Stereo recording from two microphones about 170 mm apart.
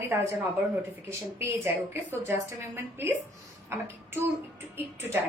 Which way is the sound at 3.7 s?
15° right (ahead or behind).